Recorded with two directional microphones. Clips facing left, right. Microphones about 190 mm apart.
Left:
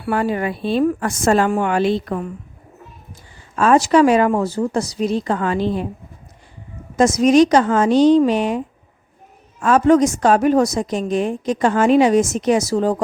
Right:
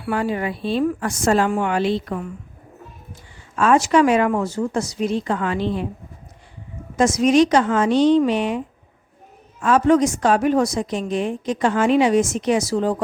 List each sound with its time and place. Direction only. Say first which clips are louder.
0.0 s a woman's voice: left 3 dB; 50° left (ahead or behind)
3.5 s speech: left 2 dB; 40° left (ahead or behind)
6.9 s a woman's voice: left 3 dB; 40° left (ahead or behind)